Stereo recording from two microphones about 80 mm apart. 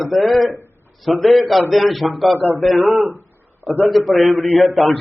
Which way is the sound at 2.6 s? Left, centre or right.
Centre.